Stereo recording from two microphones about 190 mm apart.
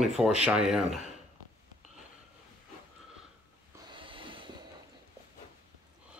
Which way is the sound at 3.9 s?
25° right (ahead or behind).